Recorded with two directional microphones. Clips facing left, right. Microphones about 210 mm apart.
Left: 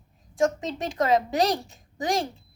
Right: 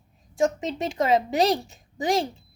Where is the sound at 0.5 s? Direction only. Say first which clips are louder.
Right 1 dB; 25° right (ahead or behind).